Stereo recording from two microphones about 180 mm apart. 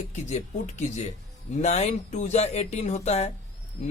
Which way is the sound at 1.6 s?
40° left (ahead or behind).